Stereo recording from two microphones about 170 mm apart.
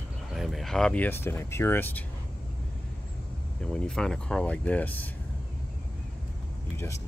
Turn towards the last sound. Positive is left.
turn(degrees=15)  # may be behind; listen again after turning